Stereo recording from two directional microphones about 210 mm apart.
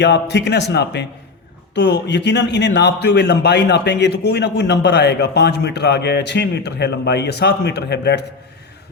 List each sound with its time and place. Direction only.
0.0 s a man's voice: 55° left (ahead or behind)